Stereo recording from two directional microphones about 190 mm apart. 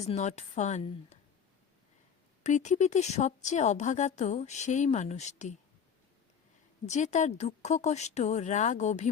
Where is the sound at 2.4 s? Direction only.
40° left (ahead or behind).